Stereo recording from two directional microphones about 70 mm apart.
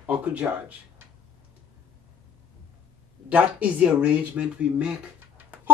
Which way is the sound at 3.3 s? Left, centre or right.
Centre.